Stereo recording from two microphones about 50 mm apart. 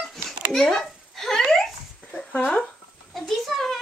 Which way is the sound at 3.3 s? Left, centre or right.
Centre.